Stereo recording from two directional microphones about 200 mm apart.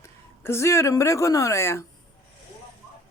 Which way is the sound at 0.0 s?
15° left (ahead or behind).